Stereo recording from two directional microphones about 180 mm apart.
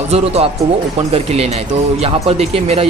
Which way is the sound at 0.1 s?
35° right (ahead or behind).